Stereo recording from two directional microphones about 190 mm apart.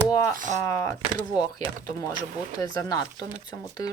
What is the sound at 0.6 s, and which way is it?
Speech, 15° left (ahead or behind).